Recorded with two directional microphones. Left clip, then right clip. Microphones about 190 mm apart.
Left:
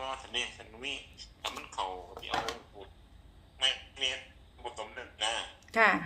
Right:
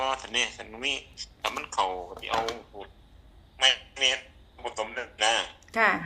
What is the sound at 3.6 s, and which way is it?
A man's voice, 50° right (ahead or behind).